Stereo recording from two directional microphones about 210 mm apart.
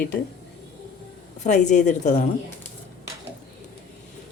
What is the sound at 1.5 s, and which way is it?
Speech, 35° left (ahead or behind).